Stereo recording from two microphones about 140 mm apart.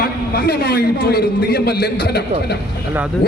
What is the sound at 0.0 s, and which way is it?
A man's voice, 90° left.